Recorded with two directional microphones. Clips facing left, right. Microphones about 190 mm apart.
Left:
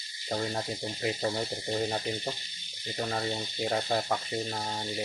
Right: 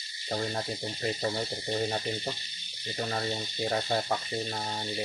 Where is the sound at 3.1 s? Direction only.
Centre (ahead or behind).